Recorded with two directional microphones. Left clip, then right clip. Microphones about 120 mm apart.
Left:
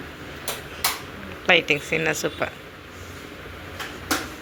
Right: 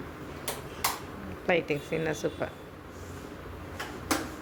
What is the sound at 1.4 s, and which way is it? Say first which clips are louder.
Speech: left 9 dB; 5° right (ahead or behind).